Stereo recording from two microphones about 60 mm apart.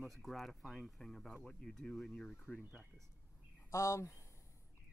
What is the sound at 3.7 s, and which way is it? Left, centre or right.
Speech, left.